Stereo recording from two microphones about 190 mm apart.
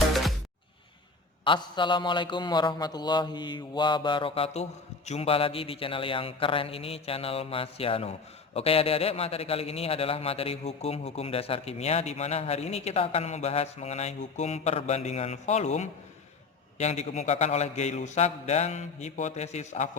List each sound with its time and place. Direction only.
0.1 s music: centre (ahead or behind)
1.5 s a man's voice: 25° left (ahead or behind)